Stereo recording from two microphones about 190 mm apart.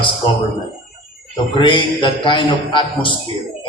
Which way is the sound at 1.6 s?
25° left (ahead or behind).